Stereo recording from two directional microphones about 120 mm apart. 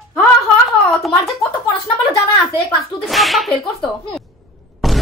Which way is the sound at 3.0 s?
Centre (ahead or behind).